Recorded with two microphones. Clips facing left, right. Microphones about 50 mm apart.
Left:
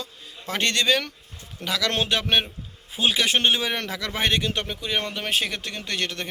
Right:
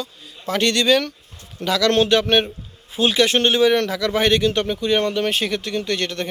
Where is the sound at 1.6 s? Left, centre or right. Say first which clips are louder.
Right 8 dB; centre.